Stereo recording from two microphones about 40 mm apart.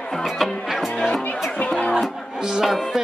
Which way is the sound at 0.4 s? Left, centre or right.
Centre.